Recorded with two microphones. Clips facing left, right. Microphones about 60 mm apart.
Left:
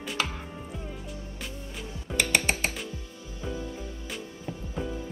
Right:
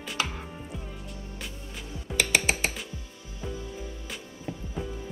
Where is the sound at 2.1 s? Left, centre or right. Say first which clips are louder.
Even; centre.